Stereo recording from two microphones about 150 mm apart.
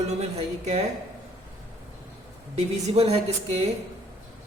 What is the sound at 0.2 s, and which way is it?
Speech, 45° right (ahead or behind).